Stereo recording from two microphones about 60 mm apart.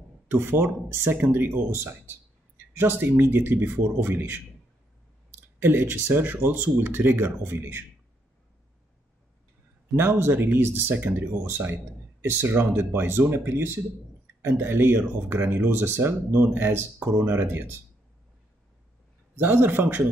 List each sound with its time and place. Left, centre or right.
0.3 s speech: right
5.6 s speech: right
9.9 s speech: right
19.3 s speech: right